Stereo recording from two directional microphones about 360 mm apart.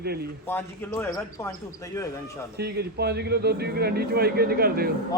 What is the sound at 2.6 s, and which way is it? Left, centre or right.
A man's voice, right.